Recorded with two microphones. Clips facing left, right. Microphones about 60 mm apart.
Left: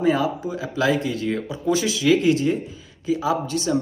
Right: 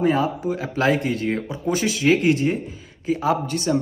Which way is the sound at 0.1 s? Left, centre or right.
Right.